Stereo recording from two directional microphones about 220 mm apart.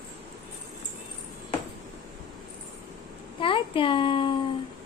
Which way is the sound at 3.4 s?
25° left (ahead or behind).